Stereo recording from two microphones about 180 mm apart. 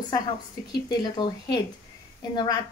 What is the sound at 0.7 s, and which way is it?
A woman's voice, 25° left (ahead or behind).